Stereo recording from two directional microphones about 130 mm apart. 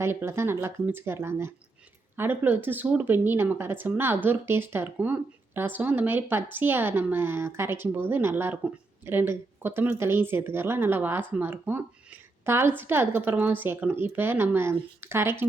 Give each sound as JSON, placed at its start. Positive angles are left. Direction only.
{"t": 0.0, "sound": "speech", "side_deg": -15}